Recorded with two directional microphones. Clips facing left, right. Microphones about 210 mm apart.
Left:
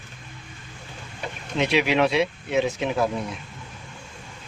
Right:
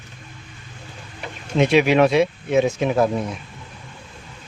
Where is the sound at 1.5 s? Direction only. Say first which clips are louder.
Right 6 dB; 50° right (ahead or behind).